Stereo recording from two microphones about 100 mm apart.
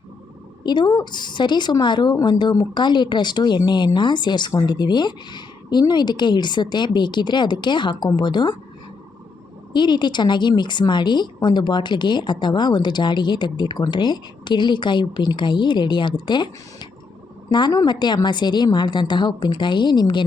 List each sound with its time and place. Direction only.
0.6 s a woman's voice: 50° left (ahead or behind)
9.7 s a woman's voice: 50° left (ahead or behind)
17.7 s a woman's voice: 45° left (ahead or behind)